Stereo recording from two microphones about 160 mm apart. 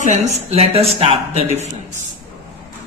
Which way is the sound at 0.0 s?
45° right (ahead or behind).